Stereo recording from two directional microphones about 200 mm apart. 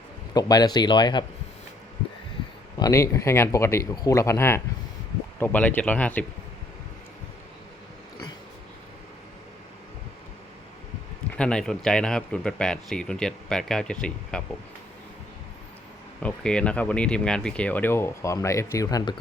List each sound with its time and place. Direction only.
0.3 s speech: 20° left (ahead or behind)
2.7 s speech: 15° left (ahead or behind)
11.3 s speech: 5° left (ahead or behind)
16.2 s speech: 5° left (ahead or behind); by 19.2 s 20° left (ahead or behind)